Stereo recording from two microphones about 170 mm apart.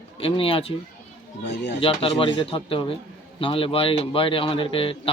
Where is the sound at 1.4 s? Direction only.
90° left.